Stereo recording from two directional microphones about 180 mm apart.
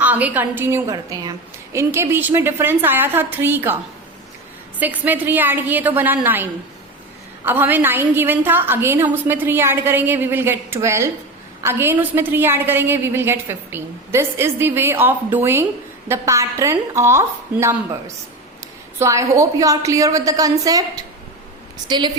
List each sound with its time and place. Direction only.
0.0 s a woman's voice: 10° right (ahead or behind)
4.8 s a woman's voice: 10° right (ahead or behind)
18.9 s a woman's voice: 15° right (ahead or behind)